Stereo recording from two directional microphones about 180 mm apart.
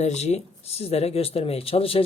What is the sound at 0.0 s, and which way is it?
Speech, 40° left (ahead or behind).